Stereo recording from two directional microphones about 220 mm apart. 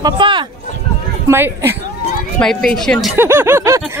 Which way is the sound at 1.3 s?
10° right (ahead or behind).